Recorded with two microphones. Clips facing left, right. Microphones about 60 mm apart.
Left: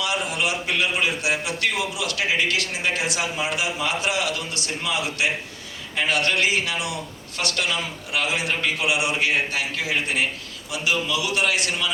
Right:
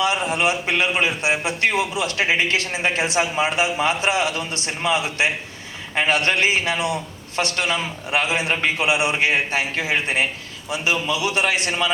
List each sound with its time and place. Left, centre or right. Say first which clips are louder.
0.0 s a man's voice: right 5 dB; right